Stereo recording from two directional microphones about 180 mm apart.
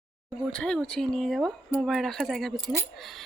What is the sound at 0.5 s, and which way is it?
Speech, 5° left (ahead or behind).